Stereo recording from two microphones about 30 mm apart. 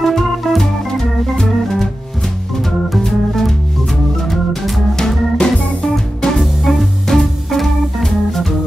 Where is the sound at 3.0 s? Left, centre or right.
Centre.